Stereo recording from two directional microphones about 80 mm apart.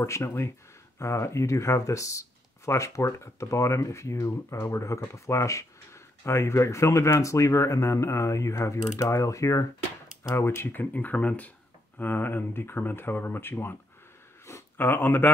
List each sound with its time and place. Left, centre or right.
0.0 s speech: left